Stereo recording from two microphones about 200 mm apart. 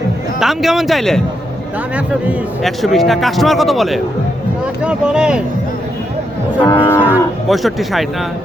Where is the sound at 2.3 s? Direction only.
Centre (ahead or behind).